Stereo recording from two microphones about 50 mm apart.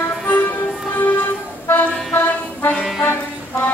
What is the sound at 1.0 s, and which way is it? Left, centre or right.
Music, left.